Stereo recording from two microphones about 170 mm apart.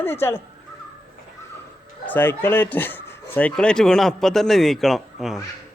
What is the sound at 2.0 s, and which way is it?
Speech, 10° left (ahead or behind).